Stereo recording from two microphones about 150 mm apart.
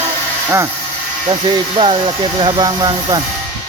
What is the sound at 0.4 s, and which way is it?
Speech, 20° right (ahead or behind).